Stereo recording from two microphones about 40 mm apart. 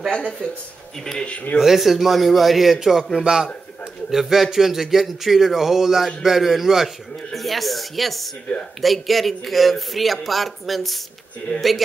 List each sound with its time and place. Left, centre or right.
0.1 s speech: centre
1.6 s speech: centre
7.3 s speech: centre
11.5 s a man's voice: left